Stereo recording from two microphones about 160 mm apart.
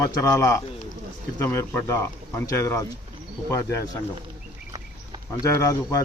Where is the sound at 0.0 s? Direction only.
20° left (ahead or behind).